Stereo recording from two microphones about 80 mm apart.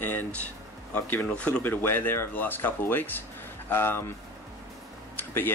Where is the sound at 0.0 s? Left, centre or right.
Left.